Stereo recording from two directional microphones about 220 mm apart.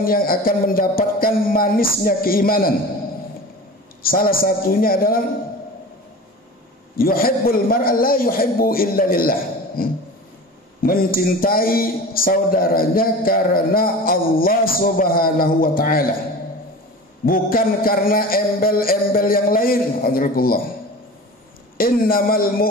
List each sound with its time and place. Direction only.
0.0 s a man's voice: 40° left (ahead or behind)
4.0 s a man's voice: 40° left (ahead or behind)
7.0 s a man's voice: 40° left (ahead or behind)
17.3 s a man's voice: 40° left (ahead or behind)
21.7 s a man's voice: 40° left (ahead or behind)